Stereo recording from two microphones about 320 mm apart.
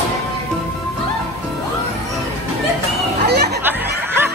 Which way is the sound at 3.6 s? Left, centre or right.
Centre.